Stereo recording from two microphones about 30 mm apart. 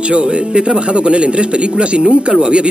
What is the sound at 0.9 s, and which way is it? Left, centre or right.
Speech, right.